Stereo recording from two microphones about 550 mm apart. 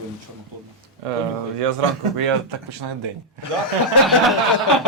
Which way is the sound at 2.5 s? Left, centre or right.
Right.